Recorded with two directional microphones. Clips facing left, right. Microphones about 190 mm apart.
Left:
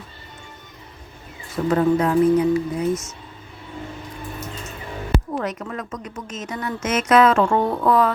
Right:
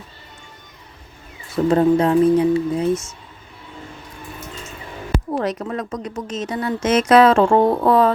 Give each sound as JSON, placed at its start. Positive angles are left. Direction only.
{"t": 1.7, "sound": "speech", "side_deg": -30}
{"t": 5.4, "sound": "speech", "side_deg": -35}